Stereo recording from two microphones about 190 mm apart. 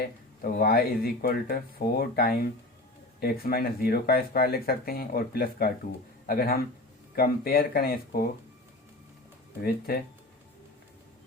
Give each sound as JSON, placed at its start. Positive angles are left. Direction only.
{"t": 0.0, "sound": "speech", "side_deg": 55}
{"t": 9.6, "sound": "speech", "side_deg": 50}